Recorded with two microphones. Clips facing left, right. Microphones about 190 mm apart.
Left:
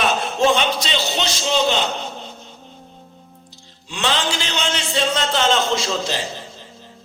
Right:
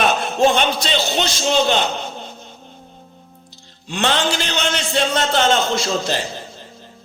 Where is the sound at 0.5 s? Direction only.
55° right (ahead or behind).